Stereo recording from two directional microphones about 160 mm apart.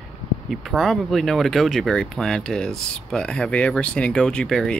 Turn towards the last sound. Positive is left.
turn(degrees=5)  # may be behind; listen again after turning